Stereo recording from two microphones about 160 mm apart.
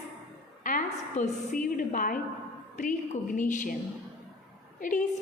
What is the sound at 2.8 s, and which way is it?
Speech, 45° left (ahead or behind).